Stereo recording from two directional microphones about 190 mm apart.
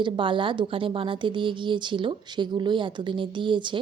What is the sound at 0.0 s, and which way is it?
A woman's voice, 25° right (ahead or behind).